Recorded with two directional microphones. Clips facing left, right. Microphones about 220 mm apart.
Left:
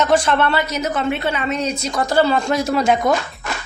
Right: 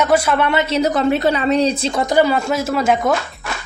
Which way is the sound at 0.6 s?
30° right (ahead or behind).